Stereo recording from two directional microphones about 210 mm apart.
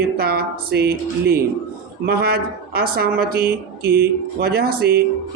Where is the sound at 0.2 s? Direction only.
50° right (ahead or behind).